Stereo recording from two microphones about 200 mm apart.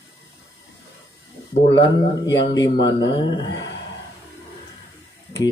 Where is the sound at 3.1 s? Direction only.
25° left (ahead or behind).